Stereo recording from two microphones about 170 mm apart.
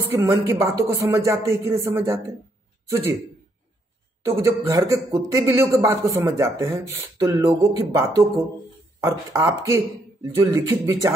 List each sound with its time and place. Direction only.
0.2 s speech: 20° right (ahead or behind)
4.2 s speech: 15° right (ahead or behind)